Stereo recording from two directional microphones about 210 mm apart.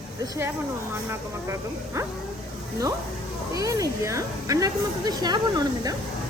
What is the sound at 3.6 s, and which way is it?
Speech, 15° right (ahead or behind).